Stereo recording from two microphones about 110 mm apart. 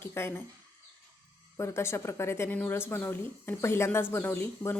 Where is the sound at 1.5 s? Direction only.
25° left (ahead or behind).